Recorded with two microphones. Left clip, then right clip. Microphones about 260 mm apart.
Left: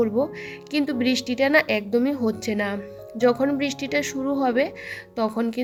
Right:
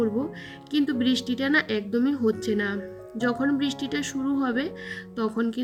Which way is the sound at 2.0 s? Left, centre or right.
Centre.